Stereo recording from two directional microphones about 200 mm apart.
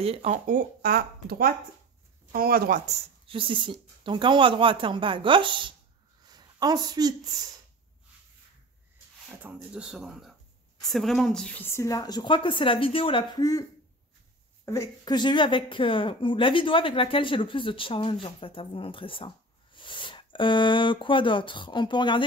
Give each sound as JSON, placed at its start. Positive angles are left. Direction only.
{"t": 0.0, "sound": "speech", "side_deg": -30}
{"t": 3.3, "sound": "speech", "side_deg": -25}
{"t": 6.2, "sound": "a sound", "side_deg": -20}
{"t": 9.4, "sound": "a woman's voice", "side_deg": -5}